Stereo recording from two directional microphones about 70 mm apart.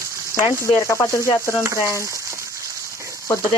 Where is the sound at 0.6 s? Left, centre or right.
Left.